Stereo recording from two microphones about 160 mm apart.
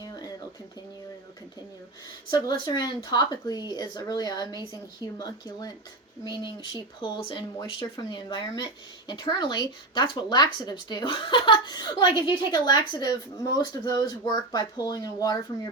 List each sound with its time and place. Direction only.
2.3 s speech: 30° left (ahead or behind)